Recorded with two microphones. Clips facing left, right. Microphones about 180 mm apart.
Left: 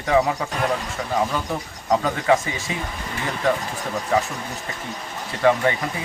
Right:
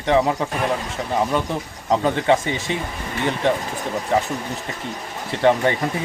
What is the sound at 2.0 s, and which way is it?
Speech, 30° right (ahead or behind).